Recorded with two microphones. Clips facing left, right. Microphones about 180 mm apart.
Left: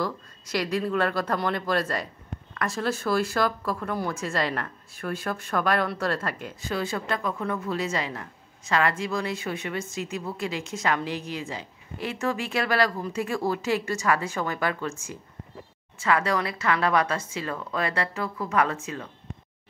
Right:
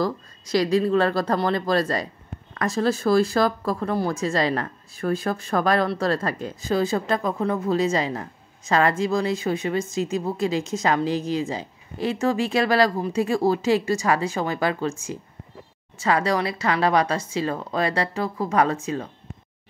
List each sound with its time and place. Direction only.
0.0 s speech: 40° right (ahead or behind)
16.0 s speech: 35° right (ahead or behind)